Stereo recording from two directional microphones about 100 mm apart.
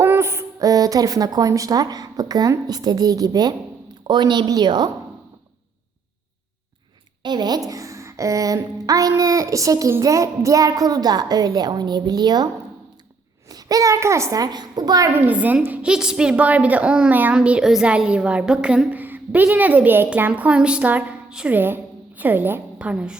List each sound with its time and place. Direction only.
0.0 s a woman's voice: 25° right (ahead or behind); by 4.9 s 45° right (ahead or behind)
7.2 s a woman's voice: 45° right (ahead or behind)
13.5 s a woman's voice: 40° right (ahead or behind)
15.1 s a woman's voice: 15° right (ahead or behind)